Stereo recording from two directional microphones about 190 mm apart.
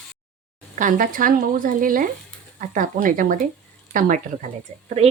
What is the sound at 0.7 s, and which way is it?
Speech, 45° right (ahead or behind).